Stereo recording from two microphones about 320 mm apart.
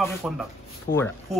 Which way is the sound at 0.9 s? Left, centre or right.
Left.